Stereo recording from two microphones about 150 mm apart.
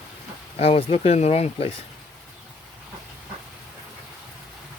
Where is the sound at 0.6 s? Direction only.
40° left (ahead or behind).